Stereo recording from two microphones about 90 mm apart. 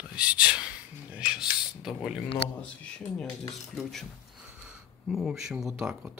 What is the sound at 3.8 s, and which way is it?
Speech, 5° left (ahead or behind).